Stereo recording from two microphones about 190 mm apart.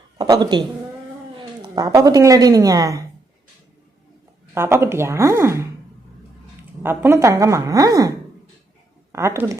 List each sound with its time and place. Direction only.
0.2 s a woman's voice: 20° right (ahead or behind)
4.5 s speech: 15° right (ahead or behind)
9.1 s speech: 15° right (ahead or behind)